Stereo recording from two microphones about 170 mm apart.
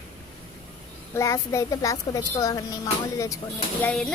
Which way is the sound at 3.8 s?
10° left (ahead or behind).